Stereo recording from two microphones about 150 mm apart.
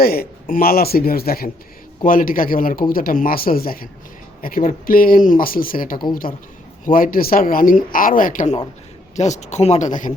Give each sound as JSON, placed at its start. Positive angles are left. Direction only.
{"t": 0.0, "sound": "a man's voice", "side_deg": 90}
{"t": 2.0, "sound": "a man's voice", "side_deg": 70}